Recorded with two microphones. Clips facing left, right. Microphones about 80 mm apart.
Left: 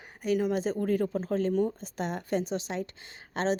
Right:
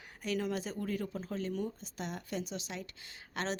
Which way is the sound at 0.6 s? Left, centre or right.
Left.